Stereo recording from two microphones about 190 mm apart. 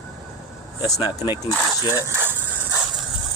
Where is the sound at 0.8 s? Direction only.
20° left (ahead or behind).